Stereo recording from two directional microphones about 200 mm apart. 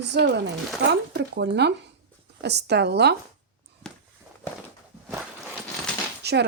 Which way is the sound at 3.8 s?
5° left (ahead or behind).